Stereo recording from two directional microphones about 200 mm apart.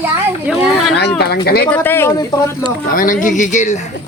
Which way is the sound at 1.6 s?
10° left (ahead or behind).